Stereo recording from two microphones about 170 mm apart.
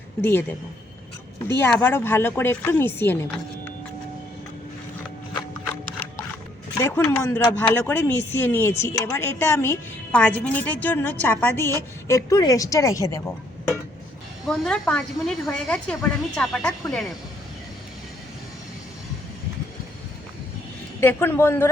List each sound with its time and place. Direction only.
0.2 s speech: 15° left (ahead or behind)
1.5 s speech: 15° left (ahead or behind)
6.7 s a woman's voice: 15° left (ahead or behind)
14.4 s a woman's voice: 5° left (ahead or behind)
21.0 s speech: 15° left (ahead or behind)